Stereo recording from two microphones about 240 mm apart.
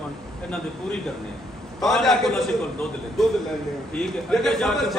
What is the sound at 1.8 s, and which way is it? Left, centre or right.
A man's voice, centre.